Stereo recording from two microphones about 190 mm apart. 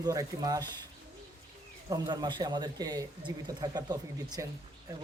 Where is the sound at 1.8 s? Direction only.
20° right (ahead or behind).